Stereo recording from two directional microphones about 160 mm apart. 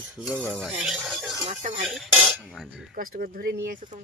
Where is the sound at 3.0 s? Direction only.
70° right (ahead or behind).